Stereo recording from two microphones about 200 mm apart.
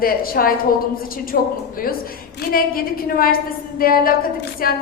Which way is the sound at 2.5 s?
45° left (ahead or behind).